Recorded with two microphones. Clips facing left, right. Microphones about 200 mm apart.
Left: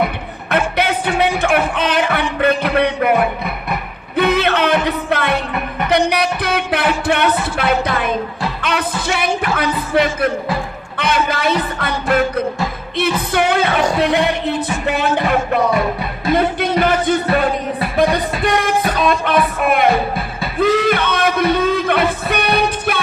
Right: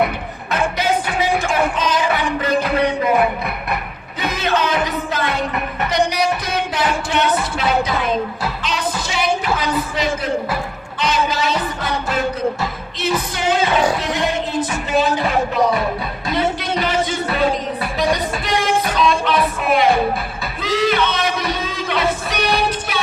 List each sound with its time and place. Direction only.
0.5 s music: 60° left (ahead or behind)
4.2 s music: 60° left (ahead or behind)
14.0 s speech: 60° left (ahead or behind)
16.3 s music: 55° left (ahead or behind)